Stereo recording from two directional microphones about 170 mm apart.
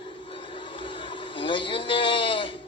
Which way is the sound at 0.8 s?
30° left (ahead or behind).